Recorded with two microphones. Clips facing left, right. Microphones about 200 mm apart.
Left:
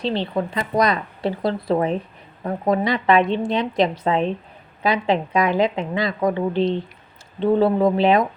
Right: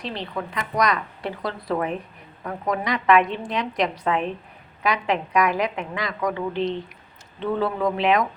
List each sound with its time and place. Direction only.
0.0 s a woman's voice: 30° left (ahead or behind)